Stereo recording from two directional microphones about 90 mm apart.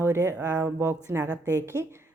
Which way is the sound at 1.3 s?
25° left (ahead or behind).